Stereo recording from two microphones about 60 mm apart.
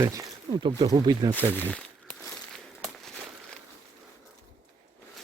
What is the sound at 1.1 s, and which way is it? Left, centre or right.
Speech, right.